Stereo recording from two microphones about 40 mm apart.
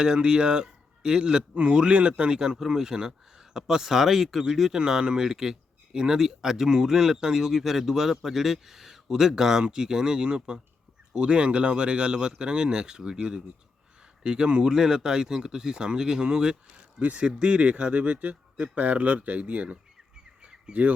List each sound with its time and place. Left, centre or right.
0.0 s a man's voice: right
16.7 s a sound: right
17.2 s speech: right
20.4 s bird: right